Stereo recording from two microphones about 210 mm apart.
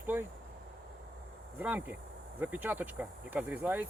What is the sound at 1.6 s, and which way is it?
Speech, 10° right (ahead or behind).